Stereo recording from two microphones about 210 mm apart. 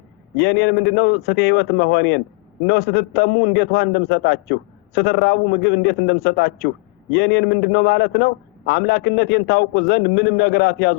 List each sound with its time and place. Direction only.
0.3 s a man's voice: 55° left (ahead or behind)